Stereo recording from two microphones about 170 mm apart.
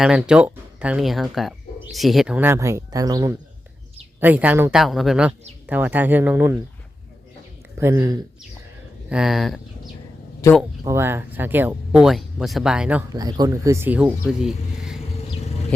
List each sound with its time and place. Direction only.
0.0 s speech: 5° right (ahead or behind); by 3.3 s 20° right (ahead or behind)
4.2 s speech: 10° right (ahead or behind)
7.8 s speech: 20° right (ahead or behind)
9.0 s speech: 5° right (ahead or behind)
10.4 s speech: 20° left (ahead or behind)
10.8 s speech: 15° right (ahead or behind)
13.1 s speech: 25° right (ahead or behind); by 15.0 s 5° right (ahead or behind)